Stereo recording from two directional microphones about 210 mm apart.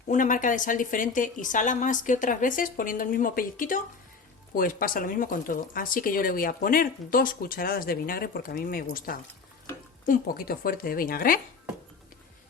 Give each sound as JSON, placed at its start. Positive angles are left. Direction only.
{"t": 0.1, "sound": "a woman's voice", "side_deg": 40}